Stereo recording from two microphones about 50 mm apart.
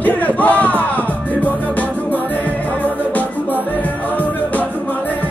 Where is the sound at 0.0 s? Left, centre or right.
Left.